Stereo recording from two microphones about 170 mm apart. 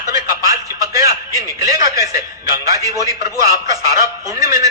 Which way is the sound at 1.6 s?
20° right (ahead or behind).